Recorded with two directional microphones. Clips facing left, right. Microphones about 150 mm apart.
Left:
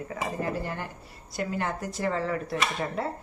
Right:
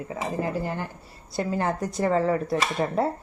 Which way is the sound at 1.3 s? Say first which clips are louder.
Right 4 dB; 35° right (ahead or behind).